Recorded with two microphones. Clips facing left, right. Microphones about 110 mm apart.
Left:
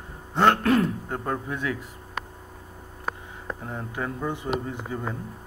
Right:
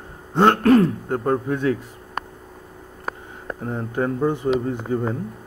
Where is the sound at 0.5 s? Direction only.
40° right (ahead or behind).